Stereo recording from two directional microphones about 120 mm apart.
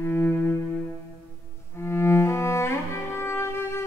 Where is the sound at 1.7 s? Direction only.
20° left (ahead or behind).